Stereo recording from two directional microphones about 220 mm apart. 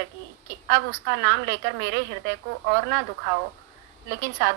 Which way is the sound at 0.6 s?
50° right (ahead or behind).